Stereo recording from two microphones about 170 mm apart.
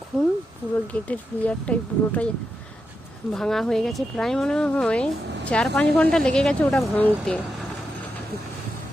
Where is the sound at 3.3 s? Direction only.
Centre (ahead or behind).